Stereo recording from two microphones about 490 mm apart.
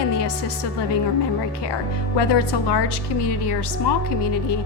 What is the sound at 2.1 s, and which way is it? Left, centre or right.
A woman's voice, left.